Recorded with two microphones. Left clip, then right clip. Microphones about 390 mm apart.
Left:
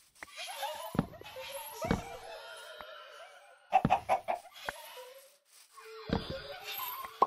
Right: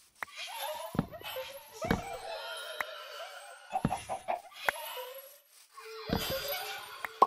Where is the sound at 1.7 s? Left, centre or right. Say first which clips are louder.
Right 2 dB; centre.